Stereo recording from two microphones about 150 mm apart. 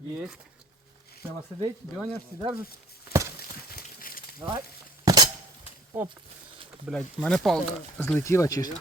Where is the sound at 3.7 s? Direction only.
80° left.